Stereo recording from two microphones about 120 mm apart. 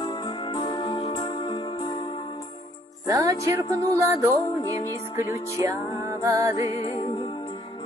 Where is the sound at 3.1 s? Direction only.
30° right (ahead or behind).